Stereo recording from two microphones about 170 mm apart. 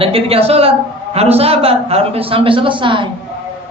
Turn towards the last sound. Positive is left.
turn(degrees=-30)  # may be behind; listen again after turning